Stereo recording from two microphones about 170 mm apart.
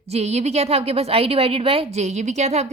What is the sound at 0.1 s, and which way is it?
Speech, 40° right (ahead or behind).